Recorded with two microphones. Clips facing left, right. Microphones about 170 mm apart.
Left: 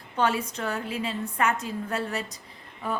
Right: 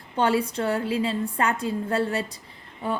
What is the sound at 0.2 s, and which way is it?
A woman's voice, 30° right (ahead or behind).